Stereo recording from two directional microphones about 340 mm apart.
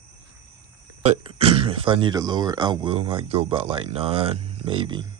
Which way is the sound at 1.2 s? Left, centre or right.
Centre.